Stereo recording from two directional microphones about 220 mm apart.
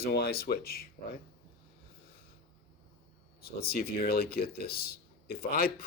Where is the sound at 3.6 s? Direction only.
45° left (ahead or behind).